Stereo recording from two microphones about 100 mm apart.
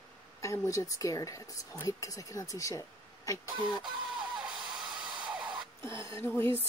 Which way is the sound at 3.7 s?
5° right (ahead or behind).